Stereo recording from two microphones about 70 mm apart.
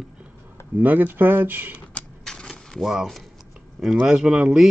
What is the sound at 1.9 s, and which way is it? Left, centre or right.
Typewriter, centre.